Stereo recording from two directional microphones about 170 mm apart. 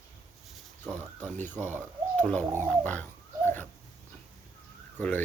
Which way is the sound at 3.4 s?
10° left (ahead or behind).